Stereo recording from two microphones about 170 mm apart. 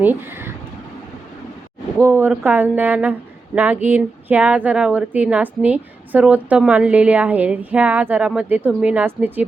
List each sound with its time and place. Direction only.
0.0 s speech: 10° right (ahead or behind)
2.0 s a woman's voice: 10° right (ahead or behind)